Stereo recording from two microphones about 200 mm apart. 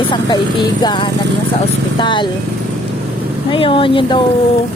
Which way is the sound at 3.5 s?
25° left (ahead or behind).